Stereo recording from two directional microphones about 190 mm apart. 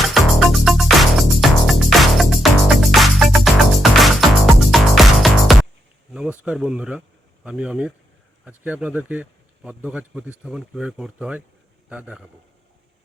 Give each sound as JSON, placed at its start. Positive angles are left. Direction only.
{"t": 0.1, "sound": "music", "side_deg": 0}
{"t": 6.1, "sound": "speech", "side_deg": -5}